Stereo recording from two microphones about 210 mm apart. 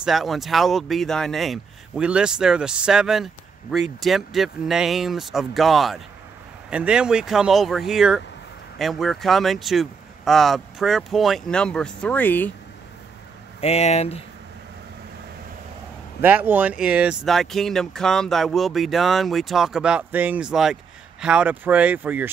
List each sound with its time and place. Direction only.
0.0 s speech: centre (ahead or behind)
13.6 s speech: 30° left (ahead or behind)
16.2 s speech: 10° right (ahead or behind)